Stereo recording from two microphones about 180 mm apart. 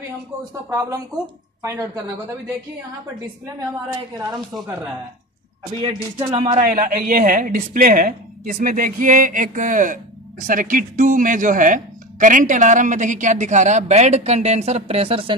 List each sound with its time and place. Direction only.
1.6 s a woman's voice: 15° right (ahead or behind)
5.8 s speech: 25° right (ahead or behind)
6.6 s speech: 50° right (ahead or behind); by 15.3 s 30° right (ahead or behind)